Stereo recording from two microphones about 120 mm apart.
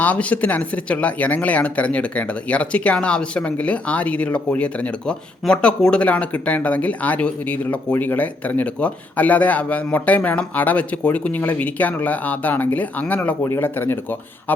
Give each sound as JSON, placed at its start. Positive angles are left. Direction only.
{"t": 0.0, "sound": "speech", "side_deg": 10}